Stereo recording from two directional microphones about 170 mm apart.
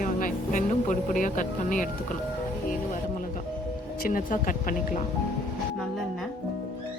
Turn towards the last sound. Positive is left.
turn(degrees=50)  # may be behind; listen again after turning